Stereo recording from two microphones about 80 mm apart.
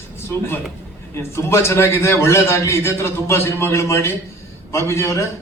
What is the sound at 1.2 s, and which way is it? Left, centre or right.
A man's voice, left.